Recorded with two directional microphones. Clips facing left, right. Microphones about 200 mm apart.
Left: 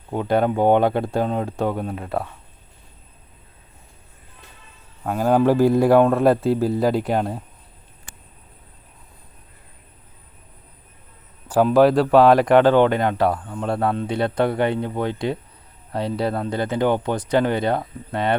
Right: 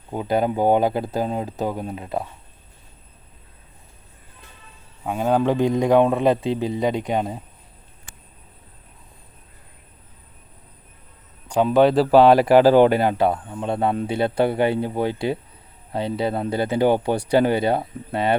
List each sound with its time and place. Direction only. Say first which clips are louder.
0.1 s speech: left 2 dB; centre (ahead or behind)
5.0 s speech: left 3 dB; centre (ahead or behind)
11.4 s speech: left 1 dB; 5° left (ahead or behind)
13.7 s a man's voice: right 1 dB; 20° right (ahead or behind)
14.1 s speech: even; 5° right (ahead or behind)